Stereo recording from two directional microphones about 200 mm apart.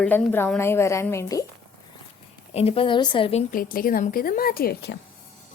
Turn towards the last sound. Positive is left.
turn(degrees=55)  # may be behind; listen again after turning